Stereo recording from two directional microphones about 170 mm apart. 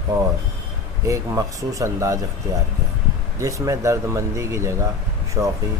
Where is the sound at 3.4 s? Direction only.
20° right (ahead or behind).